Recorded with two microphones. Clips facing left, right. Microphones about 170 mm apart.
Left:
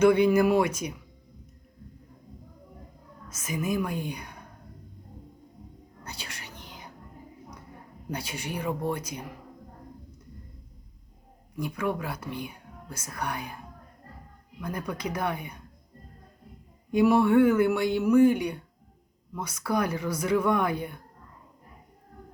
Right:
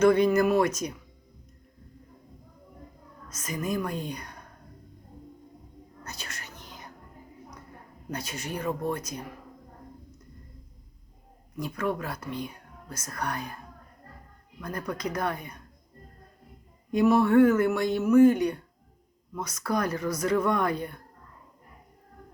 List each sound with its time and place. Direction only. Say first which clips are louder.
0.0 s speech: left 1 dB; 10° left (ahead or behind)
3.3 s speech: left 1 dB; 5° left (ahead or behind)
6.0 s whispering: even; 10° left (ahead or behind)
8.1 s speech: even; 10° left (ahead or behind)
11.5 s speech: even; 10° left (ahead or behind)
14.6 s speech: even; 10° left (ahead or behind)
16.9 s speech: even; 10° left (ahead or behind)